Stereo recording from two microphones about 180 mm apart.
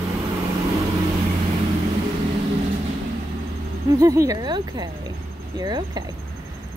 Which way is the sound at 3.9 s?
15° right (ahead or behind).